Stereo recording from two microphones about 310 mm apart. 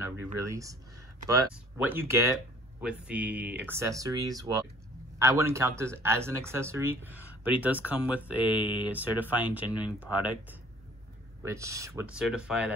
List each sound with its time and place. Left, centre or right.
0.0 s speech: centre
11.4 s speech: centre